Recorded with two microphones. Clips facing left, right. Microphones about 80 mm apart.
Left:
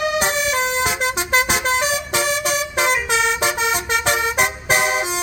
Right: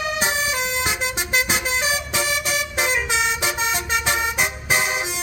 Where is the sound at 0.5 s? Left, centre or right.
Left.